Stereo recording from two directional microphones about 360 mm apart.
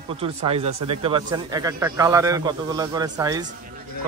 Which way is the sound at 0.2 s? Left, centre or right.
Centre.